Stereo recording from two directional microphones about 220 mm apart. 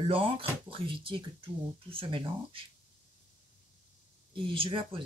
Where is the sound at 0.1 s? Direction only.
25° right (ahead or behind).